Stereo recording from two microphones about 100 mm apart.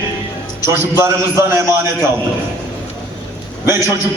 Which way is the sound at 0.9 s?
30° right (ahead or behind).